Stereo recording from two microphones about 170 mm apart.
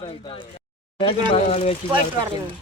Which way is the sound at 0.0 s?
30° left (ahead or behind).